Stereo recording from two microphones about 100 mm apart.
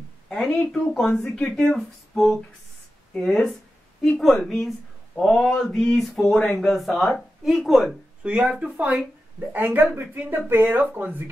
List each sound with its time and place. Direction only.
0.3 s speech: 5° left (ahead or behind); by 11.2 s 20° right (ahead or behind)